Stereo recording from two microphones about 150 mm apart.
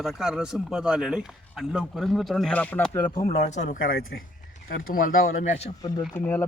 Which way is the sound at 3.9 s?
90° left.